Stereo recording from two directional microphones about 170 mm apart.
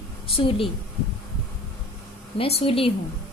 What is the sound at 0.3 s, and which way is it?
Speech, 35° left (ahead or behind).